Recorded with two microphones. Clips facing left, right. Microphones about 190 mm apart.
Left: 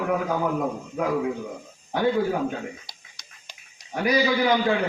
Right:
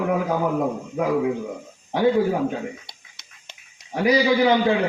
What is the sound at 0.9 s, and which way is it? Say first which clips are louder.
A man's voice: right 3 dB; 20° right (ahead or behind).